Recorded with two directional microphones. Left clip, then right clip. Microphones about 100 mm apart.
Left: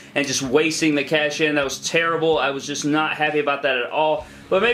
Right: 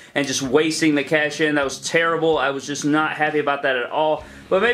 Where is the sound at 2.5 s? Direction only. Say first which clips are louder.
Even; 60° right (ahead or behind).